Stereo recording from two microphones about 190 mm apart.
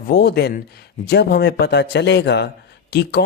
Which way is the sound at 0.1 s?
60° left (ahead or behind).